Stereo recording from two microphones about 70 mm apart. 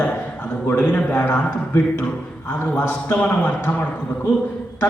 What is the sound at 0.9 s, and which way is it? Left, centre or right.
A man's voice, left.